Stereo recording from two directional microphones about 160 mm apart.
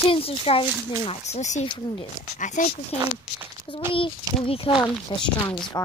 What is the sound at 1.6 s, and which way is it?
Speech, 30° left (ahead or behind).